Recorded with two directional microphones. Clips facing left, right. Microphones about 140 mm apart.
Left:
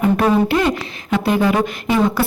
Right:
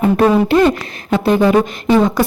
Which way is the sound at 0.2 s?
30° right (ahead or behind).